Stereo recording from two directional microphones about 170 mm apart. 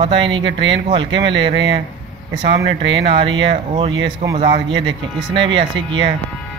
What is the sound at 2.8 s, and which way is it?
A man's voice, 30° right (ahead or behind).